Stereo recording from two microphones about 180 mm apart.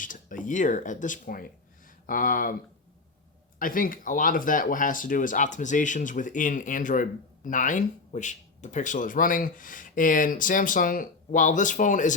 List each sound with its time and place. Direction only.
0.0 s speech: 45° left (ahead or behind)
3.6 s speech: 50° left (ahead or behind)